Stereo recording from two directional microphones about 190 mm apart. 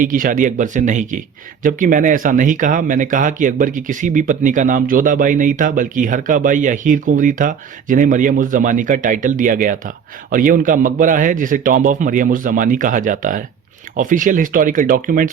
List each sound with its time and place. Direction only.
0.0 s speech: 45° right (ahead or behind)